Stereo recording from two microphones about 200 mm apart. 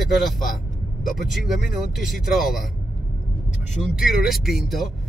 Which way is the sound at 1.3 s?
Centre (ahead or behind).